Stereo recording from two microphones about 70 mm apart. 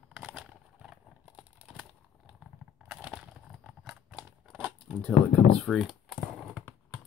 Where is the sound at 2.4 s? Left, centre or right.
Centre.